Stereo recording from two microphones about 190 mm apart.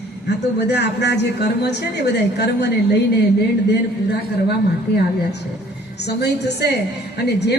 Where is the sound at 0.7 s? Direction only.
65° left (ahead or behind).